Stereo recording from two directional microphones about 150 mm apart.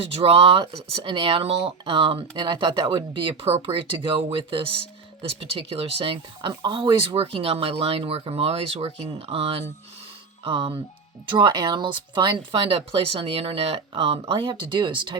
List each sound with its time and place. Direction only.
0.0 s speech: 40° right (ahead or behind)